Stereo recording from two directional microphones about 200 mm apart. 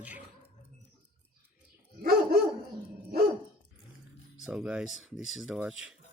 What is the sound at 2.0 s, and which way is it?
Dog, 50° right (ahead or behind).